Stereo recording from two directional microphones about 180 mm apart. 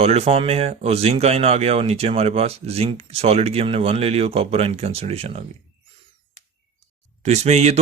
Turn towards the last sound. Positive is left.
turn(degrees=-35)  # may be behind; listen again after turning